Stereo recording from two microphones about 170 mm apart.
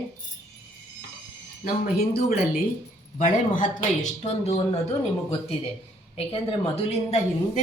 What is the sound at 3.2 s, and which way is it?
A woman's voice, 50° left (ahead or behind).